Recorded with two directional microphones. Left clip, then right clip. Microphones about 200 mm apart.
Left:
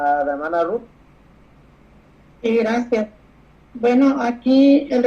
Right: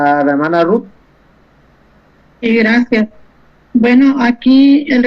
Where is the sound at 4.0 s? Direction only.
15° right (ahead or behind).